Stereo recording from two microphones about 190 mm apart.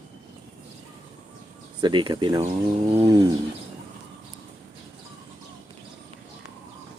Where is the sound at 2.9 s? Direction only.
15° right (ahead or behind).